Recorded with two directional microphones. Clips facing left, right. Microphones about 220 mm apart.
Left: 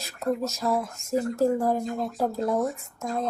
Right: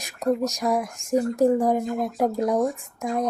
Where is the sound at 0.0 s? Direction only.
15° right (ahead or behind).